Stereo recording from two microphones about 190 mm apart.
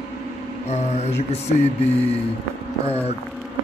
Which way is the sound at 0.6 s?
35° left (ahead or behind).